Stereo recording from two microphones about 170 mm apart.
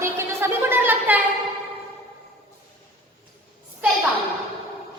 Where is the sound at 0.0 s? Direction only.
15° right (ahead or behind).